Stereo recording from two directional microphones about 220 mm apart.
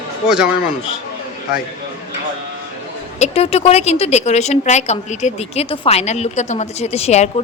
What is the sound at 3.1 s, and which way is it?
A woman's voice, 30° left (ahead or behind).